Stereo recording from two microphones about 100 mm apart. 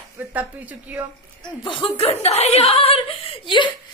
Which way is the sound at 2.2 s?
90° left.